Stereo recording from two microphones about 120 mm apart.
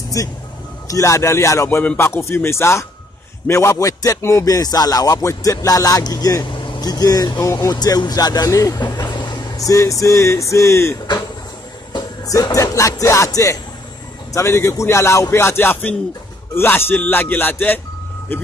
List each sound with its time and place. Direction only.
0.2 s music: 30° left (ahead or behind)
11.9 s speech: 30° left (ahead or behind)
14.3 s music: 25° left (ahead or behind)
16.5 s speech: 20° left (ahead or behind)